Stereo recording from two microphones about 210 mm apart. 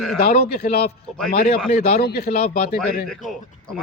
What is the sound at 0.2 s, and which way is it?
A man's voice, 40° left (ahead or behind).